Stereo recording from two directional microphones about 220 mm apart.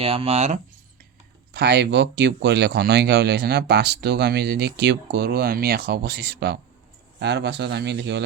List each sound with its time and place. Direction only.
0.0 s speech: 25° right (ahead or behind)
1.5 s speech: 50° right (ahead or behind)